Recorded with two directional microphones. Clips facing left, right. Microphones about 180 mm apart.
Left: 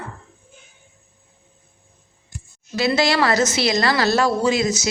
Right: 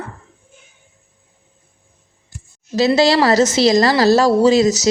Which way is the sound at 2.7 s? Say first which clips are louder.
Right 5 dB; 35° right (ahead or behind).